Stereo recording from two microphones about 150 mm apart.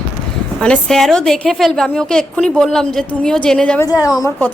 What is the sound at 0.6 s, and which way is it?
A woman's voice, 5° left (ahead or behind).